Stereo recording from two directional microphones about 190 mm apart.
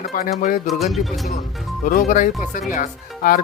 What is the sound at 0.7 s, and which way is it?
Speech, centre (ahead or behind).